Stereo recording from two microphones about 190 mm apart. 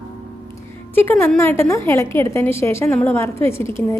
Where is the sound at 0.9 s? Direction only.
10° left (ahead or behind).